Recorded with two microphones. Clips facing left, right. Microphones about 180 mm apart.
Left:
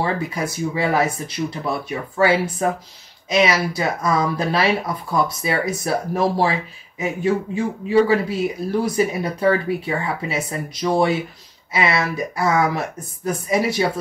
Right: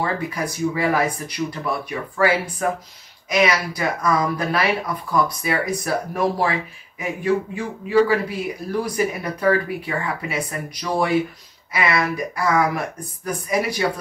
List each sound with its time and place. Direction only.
0.0 s speech: 25° left (ahead or behind)